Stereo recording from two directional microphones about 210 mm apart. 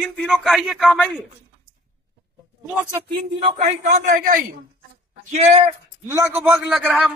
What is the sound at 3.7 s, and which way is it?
A man's voice, 35° right (ahead or behind).